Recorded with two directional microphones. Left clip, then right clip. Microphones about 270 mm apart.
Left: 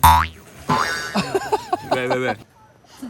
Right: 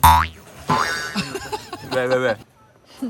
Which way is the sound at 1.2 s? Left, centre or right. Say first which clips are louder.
Left 6 dB; left.